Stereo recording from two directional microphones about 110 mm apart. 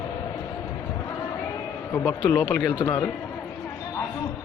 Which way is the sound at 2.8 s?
25° left (ahead or behind).